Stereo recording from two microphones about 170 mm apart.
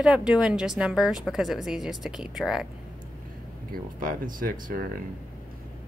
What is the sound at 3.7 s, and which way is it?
Speech, 55° right (ahead or behind).